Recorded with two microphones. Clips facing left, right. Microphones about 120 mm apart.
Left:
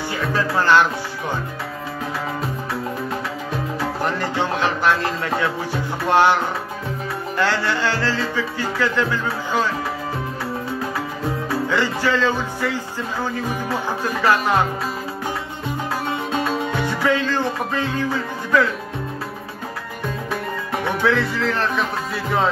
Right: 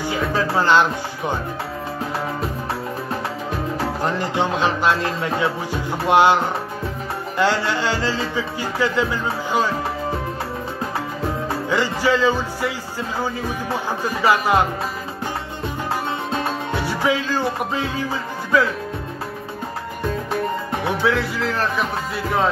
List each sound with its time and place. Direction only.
0.0 s music: 15° right (ahead or behind)
4.0 s music: 15° right (ahead or behind)
11.7 s music: 15° right (ahead or behind)
14.0 s music: 15° right (ahead or behind)
16.8 s music: 10° right (ahead or behind)
21.0 s speech: centre (ahead or behind)